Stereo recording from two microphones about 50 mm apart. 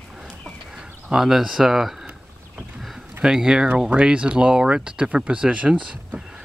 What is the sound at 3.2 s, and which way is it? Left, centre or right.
Speech, centre.